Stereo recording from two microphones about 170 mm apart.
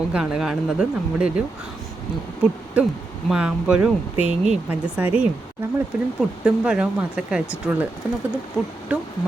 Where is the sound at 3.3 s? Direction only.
5° right (ahead or behind).